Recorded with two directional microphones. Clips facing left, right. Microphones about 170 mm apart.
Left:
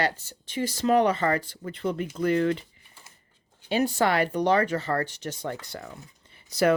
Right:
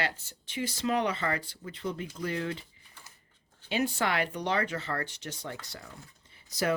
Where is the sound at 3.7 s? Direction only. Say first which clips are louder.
Left 6 dB; 40° left (ahead or behind).